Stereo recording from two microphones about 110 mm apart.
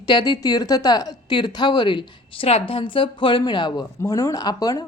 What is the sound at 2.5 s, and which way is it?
A woman's voice, 60° left (ahead or behind).